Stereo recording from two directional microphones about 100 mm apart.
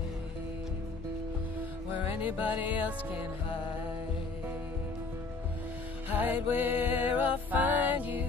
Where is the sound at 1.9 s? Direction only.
15° right (ahead or behind).